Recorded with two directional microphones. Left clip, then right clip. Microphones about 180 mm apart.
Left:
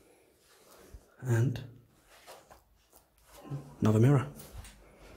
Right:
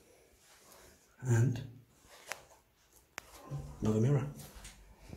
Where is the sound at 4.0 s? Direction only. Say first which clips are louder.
Left 8 dB; 40° left (ahead or behind).